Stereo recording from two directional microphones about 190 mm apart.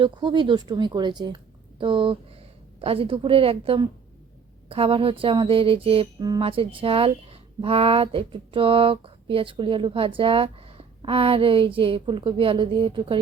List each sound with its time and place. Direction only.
0.0 s speech: 25° right (ahead or behind)